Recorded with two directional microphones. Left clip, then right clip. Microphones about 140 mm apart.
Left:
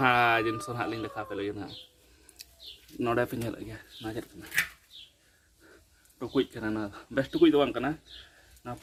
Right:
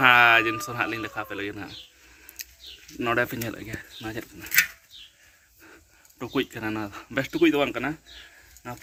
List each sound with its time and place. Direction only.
0.0 s speech: centre (ahead or behind)
2.4 s bird: 5° left (ahead or behind)
3.0 s speech: 5° right (ahead or behind)
3.8 s speech: 25° right (ahead or behind)
6.1 s speech: 15° right (ahead or behind)